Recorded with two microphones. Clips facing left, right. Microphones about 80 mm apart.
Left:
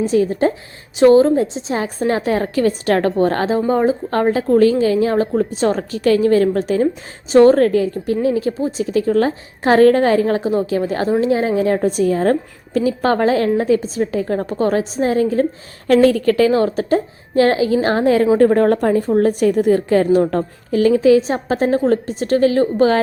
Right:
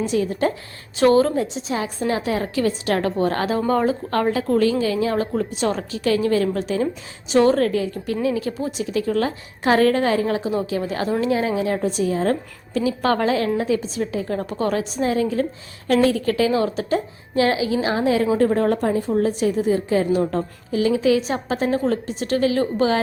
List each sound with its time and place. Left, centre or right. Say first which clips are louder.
0.1 s a woman's voice: left 5 dB; left
3.7 s a woman's voice: left 4 dB; left
15.9 s a woman's voice: left 6 dB; left